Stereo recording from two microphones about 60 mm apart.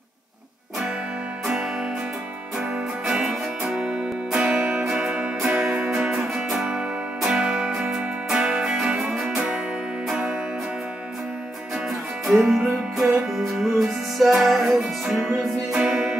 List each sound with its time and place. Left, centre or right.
1.4 s music: centre
10.0 s music: centre
12.3 s music: centre